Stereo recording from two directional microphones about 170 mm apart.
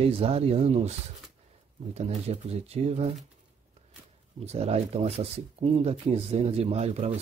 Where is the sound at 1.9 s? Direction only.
40° right (ahead or behind).